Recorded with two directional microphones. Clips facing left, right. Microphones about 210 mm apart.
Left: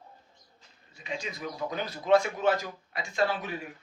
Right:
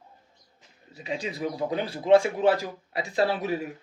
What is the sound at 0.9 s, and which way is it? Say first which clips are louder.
Speech: right 5 dB; 35° right (ahead or behind).